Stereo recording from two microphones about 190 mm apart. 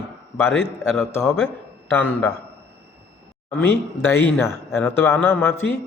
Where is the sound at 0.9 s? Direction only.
15° left (ahead or behind).